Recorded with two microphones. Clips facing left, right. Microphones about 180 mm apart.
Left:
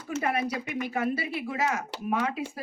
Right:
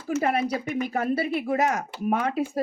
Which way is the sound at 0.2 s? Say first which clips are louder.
Right 3 dB; 30° right (ahead or behind).